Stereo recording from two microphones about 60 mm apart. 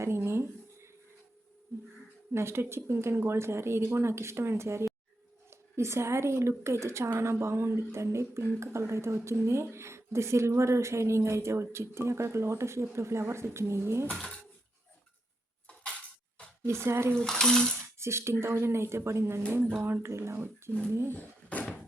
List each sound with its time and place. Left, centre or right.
0.0 s a sound: right
2.3 s speech: right
14.1 s speech: centre
16.6 s speech: right
17.2 s speech: centre
18.0 s speech: right
21.1 s a sound: left